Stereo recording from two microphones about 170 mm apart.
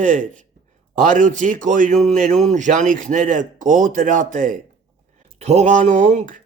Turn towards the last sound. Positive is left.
turn(degrees=-45)  # may be behind; listen again after turning